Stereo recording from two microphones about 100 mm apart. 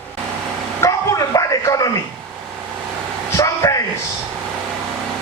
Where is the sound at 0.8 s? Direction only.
35° left (ahead or behind).